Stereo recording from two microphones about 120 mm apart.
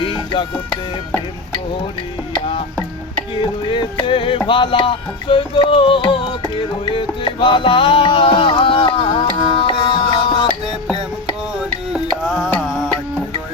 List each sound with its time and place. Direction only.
0.1 s music: 45° left (ahead or behind)
3.4 s music: 40° left (ahead or behind)
11.9 s music: centre (ahead or behind)
12.5 s music: 15° left (ahead or behind)